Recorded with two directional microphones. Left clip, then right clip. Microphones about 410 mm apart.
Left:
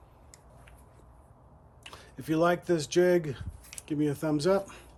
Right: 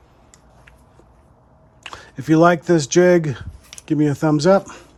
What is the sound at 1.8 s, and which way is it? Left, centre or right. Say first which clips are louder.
Speech: right 12 dB; centre.